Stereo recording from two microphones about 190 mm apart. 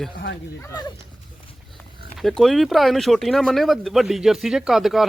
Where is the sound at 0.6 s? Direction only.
15° left (ahead or behind).